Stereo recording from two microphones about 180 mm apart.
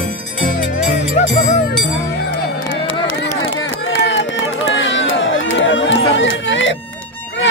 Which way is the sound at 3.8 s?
90° left.